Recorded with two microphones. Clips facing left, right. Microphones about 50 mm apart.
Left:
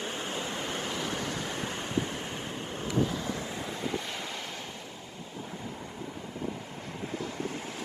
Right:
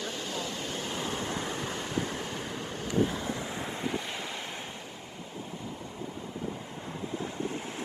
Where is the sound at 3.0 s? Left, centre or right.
Right.